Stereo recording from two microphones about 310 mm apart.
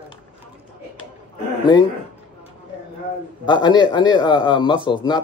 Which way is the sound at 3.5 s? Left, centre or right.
Centre.